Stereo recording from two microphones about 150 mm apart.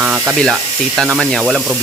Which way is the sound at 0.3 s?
Centre (ahead or behind).